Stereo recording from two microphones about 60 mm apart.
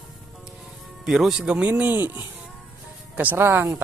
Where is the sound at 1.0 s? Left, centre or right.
Centre; by 1.9 s right.